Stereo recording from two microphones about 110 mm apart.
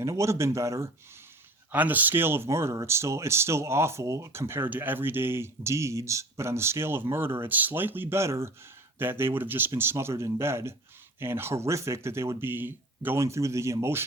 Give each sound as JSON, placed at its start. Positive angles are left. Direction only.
{"t": 0.0, "sound": "speech", "side_deg": -25}
{"t": 1.7, "sound": "speech", "side_deg": -15}